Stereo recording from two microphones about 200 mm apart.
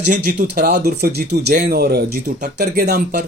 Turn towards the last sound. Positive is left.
turn(degrees=-50)  # may be behind; listen again after turning